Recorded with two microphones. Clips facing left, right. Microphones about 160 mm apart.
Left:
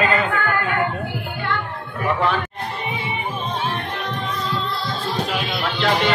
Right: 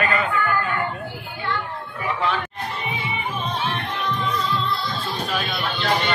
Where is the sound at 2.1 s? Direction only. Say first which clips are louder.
Left 4 dB; 55° left (ahead or behind).